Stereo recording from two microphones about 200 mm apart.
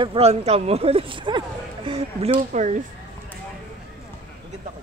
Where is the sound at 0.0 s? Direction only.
30° right (ahead or behind).